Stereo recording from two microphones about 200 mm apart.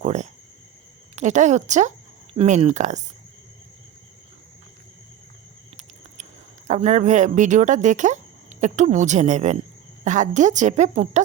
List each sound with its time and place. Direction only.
0.0 s speech: 35° right (ahead or behind)
6.7 s speech: 35° right (ahead or behind)